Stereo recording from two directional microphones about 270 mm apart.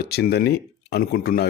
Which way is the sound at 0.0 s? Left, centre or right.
Left.